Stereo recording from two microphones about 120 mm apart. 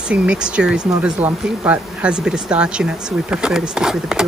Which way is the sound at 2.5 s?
10° right (ahead or behind).